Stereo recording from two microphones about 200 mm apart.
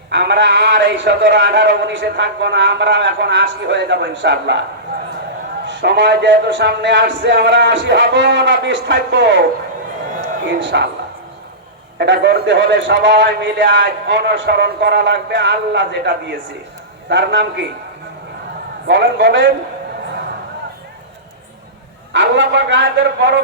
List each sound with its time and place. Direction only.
0.1 s a man's voice: 60° right (ahead or behind)
5.6 s a man's voice: 60° right (ahead or behind)
10.6 s a man's voice: 60° right (ahead or behind)
11.9 s a man's voice: 60° right (ahead or behind)
18.9 s a man's voice: 65° right (ahead or behind)
22.1 s a man's voice: 60° right (ahead or behind)